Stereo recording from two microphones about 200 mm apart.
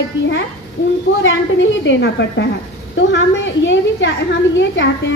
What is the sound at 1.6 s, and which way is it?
A woman's voice, 70° left (ahead or behind).